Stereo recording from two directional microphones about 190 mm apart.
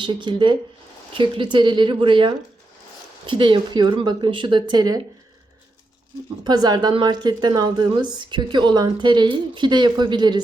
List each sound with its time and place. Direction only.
0.0 s a woman's voice: 25° right (ahead or behind)
6.4 s a woman's voice: 20° right (ahead or behind)